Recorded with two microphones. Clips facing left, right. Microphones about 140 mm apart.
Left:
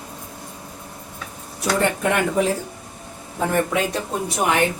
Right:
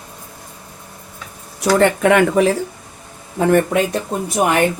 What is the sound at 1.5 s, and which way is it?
Speech, 80° right.